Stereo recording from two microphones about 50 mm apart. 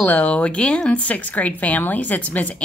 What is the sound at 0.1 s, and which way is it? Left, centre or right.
A woman's voice, left.